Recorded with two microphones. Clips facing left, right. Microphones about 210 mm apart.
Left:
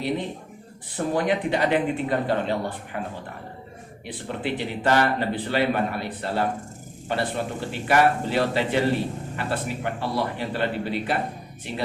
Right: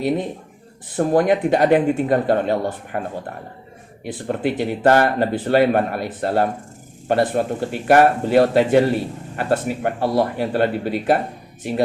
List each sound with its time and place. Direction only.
0.9 s speech: 45° right (ahead or behind)
4.0 s speech: 45° right (ahead or behind)